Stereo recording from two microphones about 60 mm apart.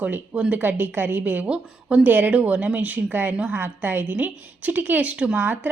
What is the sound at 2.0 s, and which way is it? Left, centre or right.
A woman's voice, right.